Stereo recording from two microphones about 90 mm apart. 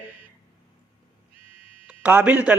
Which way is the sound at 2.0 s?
20° right (ahead or behind).